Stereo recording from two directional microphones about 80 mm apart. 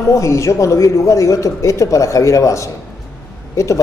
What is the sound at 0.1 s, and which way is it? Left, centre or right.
A woman's voice, left.